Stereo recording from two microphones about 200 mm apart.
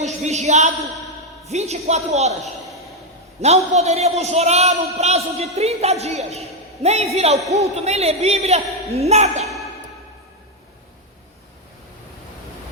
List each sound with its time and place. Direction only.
0.2 s a sound: 35° right (ahead or behind)
1.5 s a man's voice: 35° right (ahead or behind)
3.4 s a man's voice: 35° right (ahead or behind)